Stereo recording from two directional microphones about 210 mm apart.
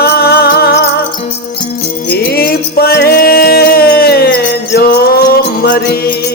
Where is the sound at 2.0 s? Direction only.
50° left (ahead or behind).